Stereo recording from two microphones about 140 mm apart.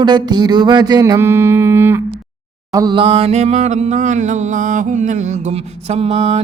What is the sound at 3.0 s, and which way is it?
Mantra, 40° right (ahead or behind).